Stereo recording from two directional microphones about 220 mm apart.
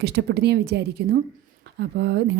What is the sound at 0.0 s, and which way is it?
A woman's voice, 50° right (ahead or behind).